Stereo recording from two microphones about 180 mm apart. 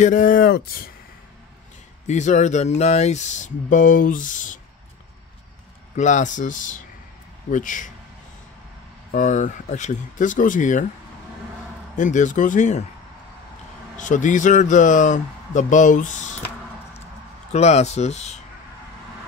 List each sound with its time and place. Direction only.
0.0 s speech: 45° left (ahead or behind)
2.0 s speech: 40° left (ahead or behind)
5.9 s speech: 40° left (ahead or behind)
9.1 s speech: 45° left (ahead or behind)
12.0 s speech: 45° left (ahead or behind)
13.9 s speech: 45° left (ahead or behind)
17.5 s speech: 35° left (ahead or behind)